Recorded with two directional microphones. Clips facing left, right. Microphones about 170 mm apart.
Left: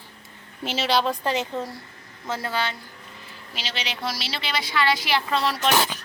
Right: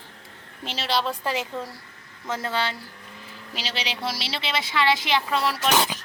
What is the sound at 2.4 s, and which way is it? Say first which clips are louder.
A woman's voice: right 1 dB; 25° right (ahead or behind).